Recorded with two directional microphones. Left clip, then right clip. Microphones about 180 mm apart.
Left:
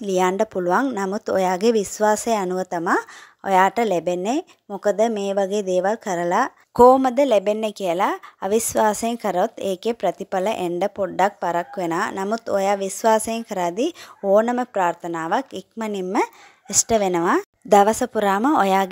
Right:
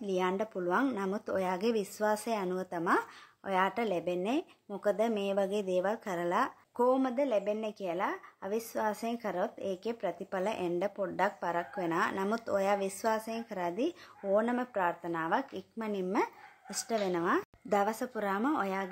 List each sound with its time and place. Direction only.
0.0 s speech: 55° left (ahead or behind)